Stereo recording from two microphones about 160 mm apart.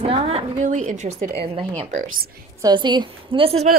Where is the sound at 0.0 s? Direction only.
40° right (ahead or behind).